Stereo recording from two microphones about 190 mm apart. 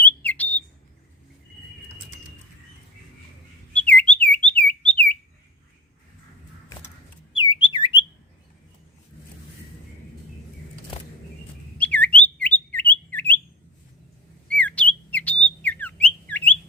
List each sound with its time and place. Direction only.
0.0 s bird: 10° left (ahead or behind)
3.8 s bird: 5° left (ahead or behind)
7.3 s bird: 25° left (ahead or behind)
11.8 s bird: 10° left (ahead or behind)
14.5 s bird: 5° left (ahead or behind)